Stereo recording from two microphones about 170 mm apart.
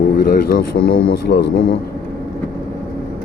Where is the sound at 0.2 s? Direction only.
65° left (ahead or behind).